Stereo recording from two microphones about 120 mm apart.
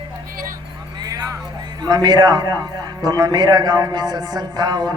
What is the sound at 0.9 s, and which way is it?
A man's voice, 35° right (ahead or behind).